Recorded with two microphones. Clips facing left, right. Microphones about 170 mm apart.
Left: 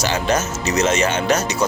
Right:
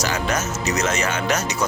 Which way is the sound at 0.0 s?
30° left (ahead or behind).